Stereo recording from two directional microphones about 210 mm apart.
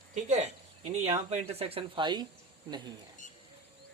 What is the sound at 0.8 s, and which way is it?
Speech, 35° right (ahead or behind).